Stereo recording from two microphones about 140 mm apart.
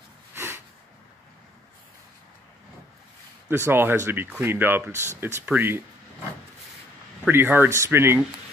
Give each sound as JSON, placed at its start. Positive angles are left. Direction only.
{"t": 0.3, "sound": "a sound", "side_deg": -15}
{"t": 3.4, "sound": "speech", "side_deg": -15}
{"t": 7.2, "sound": "speech", "side_deg": -15}